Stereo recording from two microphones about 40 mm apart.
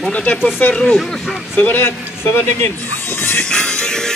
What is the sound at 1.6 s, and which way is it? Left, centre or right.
Speech, left.